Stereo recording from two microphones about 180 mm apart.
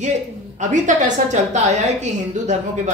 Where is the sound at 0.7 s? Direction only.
45° right (ahead or behind).